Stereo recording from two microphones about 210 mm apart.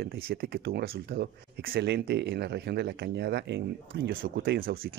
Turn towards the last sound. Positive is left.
turn(degrees=-45)  # may be behind; listen again after turning